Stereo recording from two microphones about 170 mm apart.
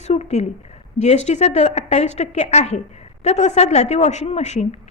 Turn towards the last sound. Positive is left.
turn(degrees=40)  # may be behind; listen again after turning